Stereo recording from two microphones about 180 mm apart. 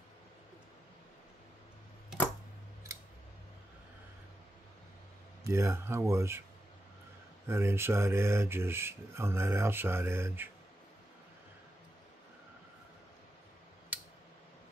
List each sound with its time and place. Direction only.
5.4 s speech: 15° right (ahead or behind)
7.4 s speech: 15° right (ahead or behind)